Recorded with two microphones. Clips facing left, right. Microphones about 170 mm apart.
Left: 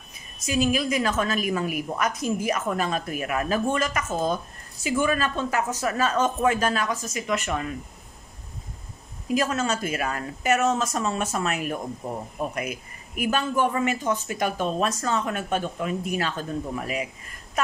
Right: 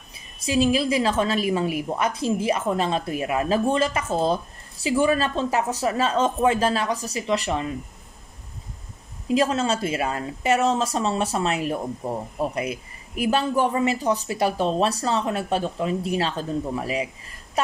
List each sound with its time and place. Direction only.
0.5 s a woman's voice: 30° right (ahead or behind)
9.3 s a woman's voice: 30° right (ahead or behind)